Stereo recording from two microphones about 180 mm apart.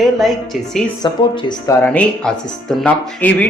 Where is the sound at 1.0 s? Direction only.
25° left (ahead or behind).